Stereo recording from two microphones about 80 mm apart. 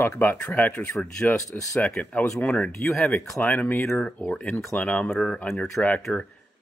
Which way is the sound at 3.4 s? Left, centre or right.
Left.